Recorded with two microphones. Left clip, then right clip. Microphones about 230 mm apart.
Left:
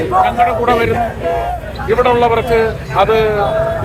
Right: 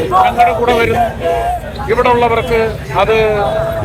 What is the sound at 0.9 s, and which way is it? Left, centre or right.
Speech, right.